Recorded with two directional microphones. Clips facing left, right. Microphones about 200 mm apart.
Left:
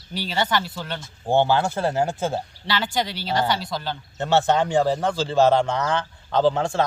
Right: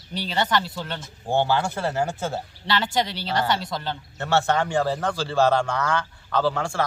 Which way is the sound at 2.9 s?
25° right (ahead or behind).